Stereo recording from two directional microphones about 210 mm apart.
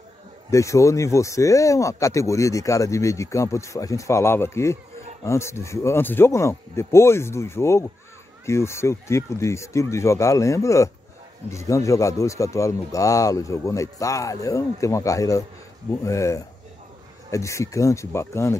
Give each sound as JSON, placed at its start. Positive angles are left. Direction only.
{"t": 0.5, "sound": "speech", "side_deg": 15}